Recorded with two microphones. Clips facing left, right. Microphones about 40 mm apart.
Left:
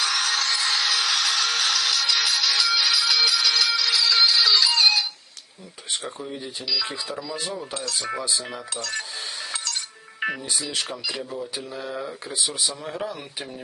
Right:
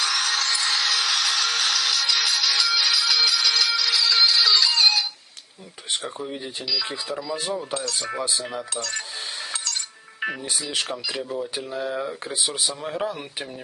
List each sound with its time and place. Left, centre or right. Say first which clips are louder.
0.0 s a sound: even; centre
5.9 s speech: right 2 dB; centre
6.2 s speech: right 1 dB; right
6.7 s speech: even; centre
8.3 s cutlery: right 1 dB; centre
10.2 s speech: left 1 dB; centre